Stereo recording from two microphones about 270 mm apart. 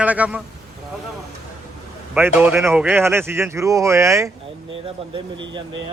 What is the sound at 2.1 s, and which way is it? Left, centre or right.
Speech, centre.